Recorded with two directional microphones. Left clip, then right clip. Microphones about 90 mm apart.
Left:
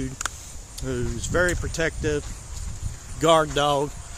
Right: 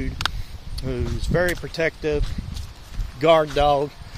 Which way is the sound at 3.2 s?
40° left (ahead or behind).